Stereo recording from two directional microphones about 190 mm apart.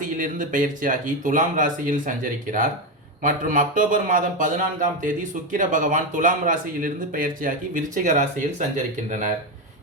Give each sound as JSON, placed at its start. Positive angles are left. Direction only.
{"t": 0.0, "sound": "a man's voice", "side_deg": -45}